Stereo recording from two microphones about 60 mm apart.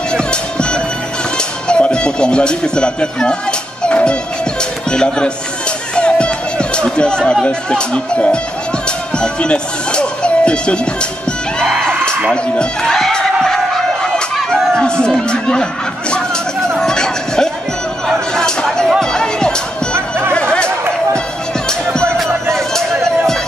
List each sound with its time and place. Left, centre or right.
0.1 s music: centre
1.7 s speech: centre
5.9 s chatter: centre
7.4 s speech: centre
11.8 s music: centre
12.5 s a sound: centre
16.8 s music: centre
20.3 s chatter: centre
21.6 s music: centre
22.5 s a sound: centre